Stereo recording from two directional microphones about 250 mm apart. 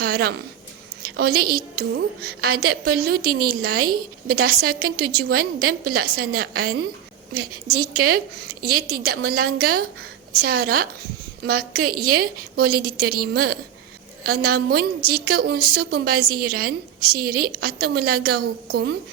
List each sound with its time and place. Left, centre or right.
0.0 s a woman's voice: right
1.0 s a sound: right
1.5 s a woman's voice: right